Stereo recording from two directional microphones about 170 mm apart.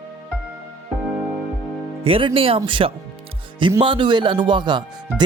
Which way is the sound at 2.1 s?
30° right (ahead or behind).